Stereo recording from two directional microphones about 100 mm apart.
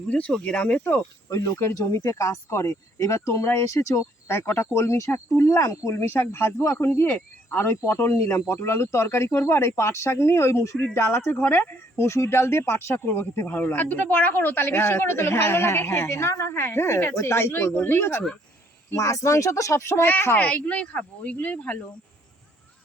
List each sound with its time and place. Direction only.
0.1 s speech: 10° left (ahead or behind)